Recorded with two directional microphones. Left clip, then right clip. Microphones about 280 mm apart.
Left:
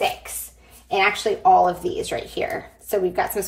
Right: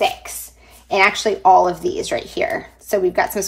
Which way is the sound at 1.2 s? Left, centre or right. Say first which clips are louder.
Right 1 dB; right.